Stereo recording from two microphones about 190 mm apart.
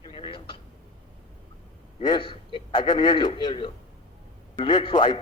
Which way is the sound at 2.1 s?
25° left (ahead or behind).